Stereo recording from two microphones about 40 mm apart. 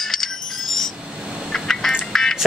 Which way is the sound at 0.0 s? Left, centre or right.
Centre.